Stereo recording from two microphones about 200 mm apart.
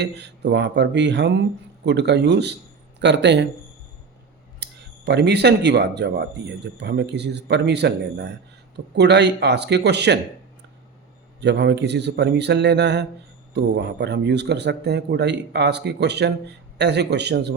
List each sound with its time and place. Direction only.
0.2 s speech: 60° right (ahead or behind)
4.6 s speech: 55° right (ahead or behind)
11.3 s speech: 60° right (ahead or behind)